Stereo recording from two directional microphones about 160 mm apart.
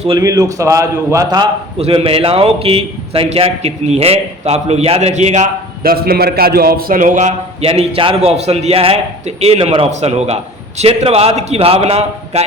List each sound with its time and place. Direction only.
0.2 s a man's voice: 20° right (ahead or behind)
1.8 s a man's voice: 40° right (ahead or behind)
5.8 s a man's voice: 70° right (ahead or behind); by 12.5 s 40° right (ahead or behind)